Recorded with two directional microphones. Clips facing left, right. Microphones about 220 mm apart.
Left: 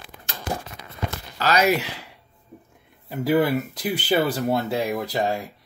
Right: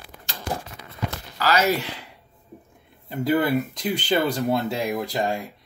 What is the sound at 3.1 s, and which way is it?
Speech, 5° left (ahead or behind).